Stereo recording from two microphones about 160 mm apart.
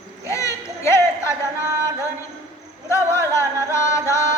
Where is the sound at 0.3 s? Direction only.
20° left (ahead or behind).